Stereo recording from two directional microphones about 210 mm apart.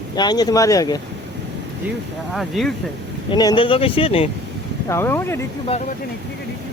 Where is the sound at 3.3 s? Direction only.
20° left (ahead or behind).